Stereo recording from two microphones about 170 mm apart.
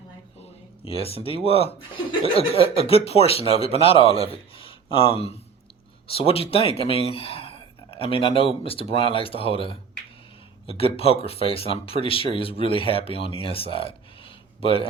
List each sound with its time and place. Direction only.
0.9 s speech: 35° left (ahead or behind)